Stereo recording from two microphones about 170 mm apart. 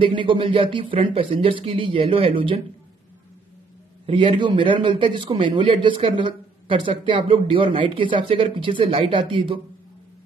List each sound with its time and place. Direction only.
0.0 s a man's voice: 30° right (ahead or behind)
4.0 s a man's voice: 30° right (ahead or behind)